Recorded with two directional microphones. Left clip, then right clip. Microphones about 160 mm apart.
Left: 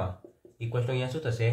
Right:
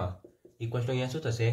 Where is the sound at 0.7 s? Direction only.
35° right (ahead or behind).